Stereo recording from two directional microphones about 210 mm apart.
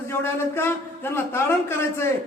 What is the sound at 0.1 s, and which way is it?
A man's voice, 10° left (ahead or behind).